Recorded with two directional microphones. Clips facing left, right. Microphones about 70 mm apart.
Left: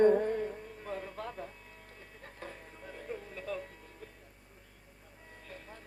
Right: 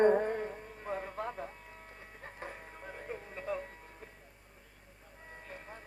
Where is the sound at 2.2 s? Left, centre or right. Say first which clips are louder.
Right 2 dB; right.